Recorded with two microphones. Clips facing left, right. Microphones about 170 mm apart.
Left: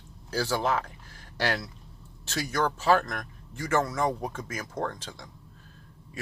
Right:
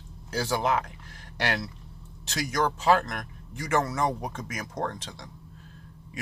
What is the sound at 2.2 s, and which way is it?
A man's voice, 20° right (ahead or behind).